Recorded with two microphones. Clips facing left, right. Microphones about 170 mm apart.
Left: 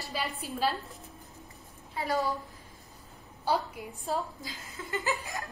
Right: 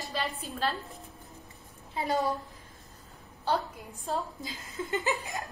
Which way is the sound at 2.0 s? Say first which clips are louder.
Right 1 dB; 20° right (ahead or behind).